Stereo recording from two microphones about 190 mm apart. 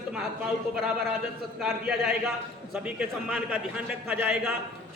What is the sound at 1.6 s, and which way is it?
A man's voice, centre (ahead or behind).